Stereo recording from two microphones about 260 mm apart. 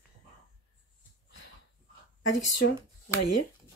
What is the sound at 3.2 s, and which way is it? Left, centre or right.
Speech, left.